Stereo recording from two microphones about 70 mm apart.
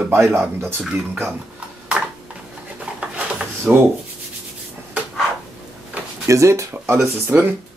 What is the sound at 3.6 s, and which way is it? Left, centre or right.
Speech, right.